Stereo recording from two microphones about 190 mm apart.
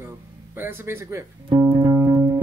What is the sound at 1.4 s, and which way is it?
Music, 25° right (ahead or behind).